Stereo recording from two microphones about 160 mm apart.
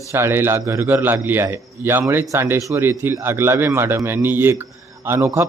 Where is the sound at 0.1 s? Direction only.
15° right (ahead or behind).